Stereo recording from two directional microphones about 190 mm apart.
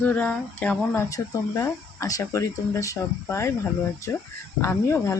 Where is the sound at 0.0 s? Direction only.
10° left (ahead or behind).